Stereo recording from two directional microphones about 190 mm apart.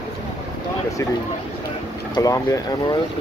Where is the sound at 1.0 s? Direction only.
15° left (ahead or behind).